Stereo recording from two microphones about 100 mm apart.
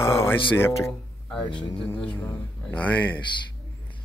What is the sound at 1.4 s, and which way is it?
Speech, 55° left (ahead or behind).